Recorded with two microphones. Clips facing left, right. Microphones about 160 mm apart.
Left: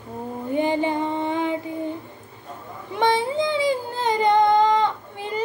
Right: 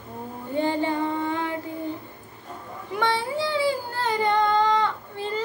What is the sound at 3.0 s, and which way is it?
Child singing, 20° left (ahead or behind).